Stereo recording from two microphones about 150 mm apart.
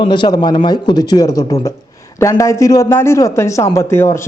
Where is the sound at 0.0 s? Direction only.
30° left (ahead or behind).